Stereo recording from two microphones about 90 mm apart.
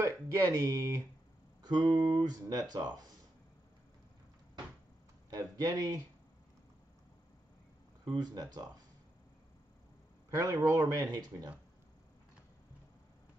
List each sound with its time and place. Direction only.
0.0 s speech: 40° right (ahead or behind)
1.6 s speech: 50° right (ahead or behind)
5.3 s a man's voice: 40° right (ahead or behind)
8.1 s speech: 50° right (ahead or behind)
10.3 s a man's voice: 40° right (ahead or behind)